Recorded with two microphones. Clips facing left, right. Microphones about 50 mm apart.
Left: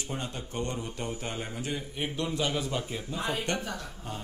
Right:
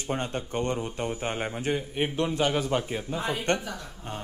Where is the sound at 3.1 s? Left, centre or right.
Right.